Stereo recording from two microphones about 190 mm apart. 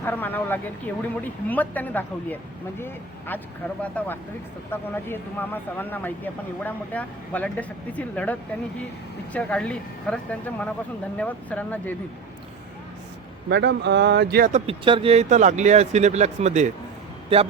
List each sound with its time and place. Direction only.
0.0 s speech: 10° left (ahead or behind)
13.5 s speech: 65° right (ahead or behind)
14.5 s a man's voice: 30° right (ahead or behind)